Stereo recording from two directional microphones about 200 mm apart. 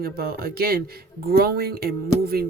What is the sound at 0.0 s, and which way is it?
Speech, 50° right (ahead or behind).